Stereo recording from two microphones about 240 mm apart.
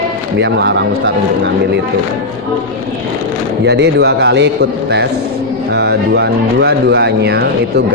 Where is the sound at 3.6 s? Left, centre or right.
Right.